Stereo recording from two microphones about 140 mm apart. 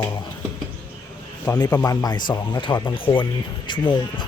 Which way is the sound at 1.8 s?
25° left (ahead or behind).